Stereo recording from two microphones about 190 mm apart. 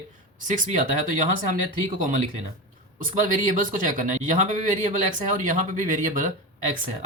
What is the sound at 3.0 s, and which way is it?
A man's voice, 45° right (ahead or behind).